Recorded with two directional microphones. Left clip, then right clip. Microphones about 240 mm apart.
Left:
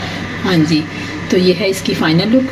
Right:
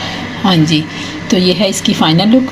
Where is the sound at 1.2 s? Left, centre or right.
Right.